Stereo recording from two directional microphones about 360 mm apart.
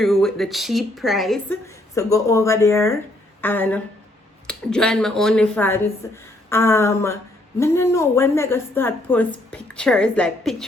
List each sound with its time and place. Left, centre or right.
0.0 s a woman's voice: centre